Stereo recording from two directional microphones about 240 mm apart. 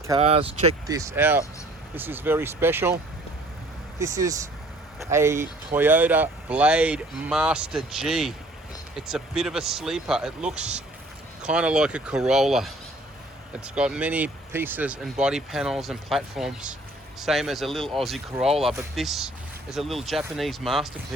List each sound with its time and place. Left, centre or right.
0.2 s speech: right
0.9 s speech: centre
4.0 s speech: centre
13.7 s speech: centre